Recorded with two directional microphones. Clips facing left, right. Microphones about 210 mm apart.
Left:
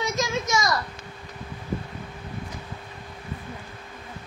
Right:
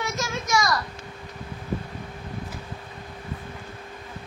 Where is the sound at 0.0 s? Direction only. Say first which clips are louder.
Left 3 dB; 20° left (ahead or behind).